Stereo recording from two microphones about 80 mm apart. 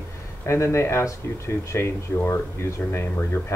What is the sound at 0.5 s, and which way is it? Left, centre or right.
Speech, left.